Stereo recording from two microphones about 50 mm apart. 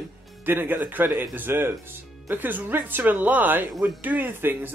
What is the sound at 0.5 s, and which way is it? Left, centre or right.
Speech, right.